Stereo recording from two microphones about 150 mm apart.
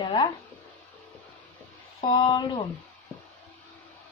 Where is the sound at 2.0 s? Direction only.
30° left (ahead or behind).